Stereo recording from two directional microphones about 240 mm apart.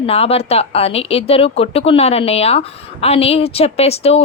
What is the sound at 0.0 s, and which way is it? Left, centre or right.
Speech, left.